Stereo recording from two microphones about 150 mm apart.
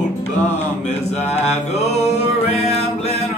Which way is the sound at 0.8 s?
45° left (ahead or behind).